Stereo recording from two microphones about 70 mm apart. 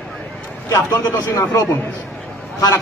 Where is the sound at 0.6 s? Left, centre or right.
Left.